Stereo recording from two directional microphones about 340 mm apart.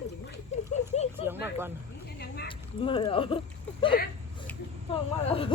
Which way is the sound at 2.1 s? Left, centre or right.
Left.